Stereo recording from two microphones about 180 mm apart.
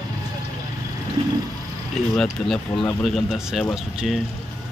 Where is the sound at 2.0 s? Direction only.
Centre (ahead or behind).